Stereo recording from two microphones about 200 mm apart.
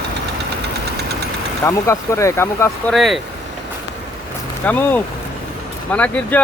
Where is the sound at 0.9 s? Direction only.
55° right (ahead or behind).